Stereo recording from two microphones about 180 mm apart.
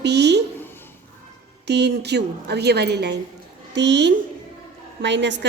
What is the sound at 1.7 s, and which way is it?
A woman's voice, 65° right (ahead or behind).